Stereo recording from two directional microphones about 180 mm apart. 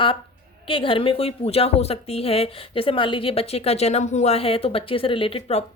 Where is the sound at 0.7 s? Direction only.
30° left (ahead or behind).